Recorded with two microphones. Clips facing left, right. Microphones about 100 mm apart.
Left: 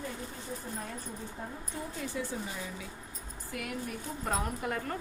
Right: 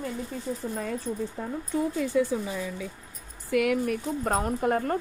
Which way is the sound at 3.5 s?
90° right.